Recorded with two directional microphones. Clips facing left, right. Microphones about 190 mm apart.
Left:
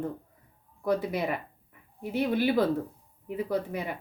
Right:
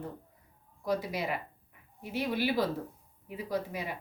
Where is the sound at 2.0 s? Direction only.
50° left (ahead or behind).